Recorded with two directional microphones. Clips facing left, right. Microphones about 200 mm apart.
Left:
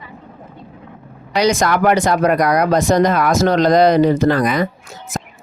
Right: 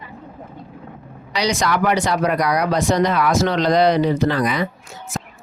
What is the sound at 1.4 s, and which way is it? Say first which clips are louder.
Speech: left 5 dB; 50° left (ahead or behind).